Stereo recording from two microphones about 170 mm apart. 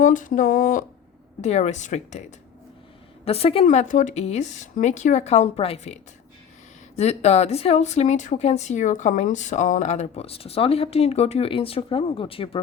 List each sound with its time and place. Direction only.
0.0 s a woman's voice: 50° left (ahead or behind)
1.4 s a woman's voice: 40° left (ahead or behind)
3.2 s a woman's voice: 35° left (ahead or behind)